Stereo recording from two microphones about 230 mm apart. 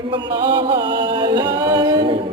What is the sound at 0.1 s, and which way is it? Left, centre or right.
Music, right.